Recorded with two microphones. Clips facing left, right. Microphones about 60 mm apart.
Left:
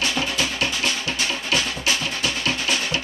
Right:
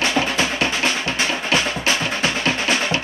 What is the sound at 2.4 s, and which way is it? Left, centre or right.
Music, right.